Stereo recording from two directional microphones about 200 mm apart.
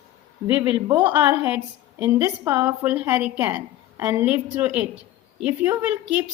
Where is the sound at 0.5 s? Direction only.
10° right (ahead or behind).